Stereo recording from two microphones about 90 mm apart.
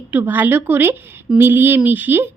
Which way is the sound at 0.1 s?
20° right (ahead or behind).